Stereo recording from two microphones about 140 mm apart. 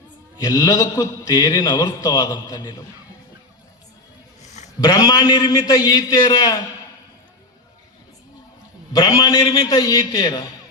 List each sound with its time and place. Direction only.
0.3 s a man's voice: 25° left (ahead or behind)
4.4 s a sound: 55° left (ahead or behind)
4.8 s a man's voice: 30° left (ahead or behind)
8.9 s a man's voice: 30° left (ahead or behind)